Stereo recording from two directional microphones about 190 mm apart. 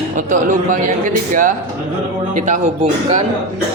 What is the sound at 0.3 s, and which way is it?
Speech, 40° right (ahead or behind).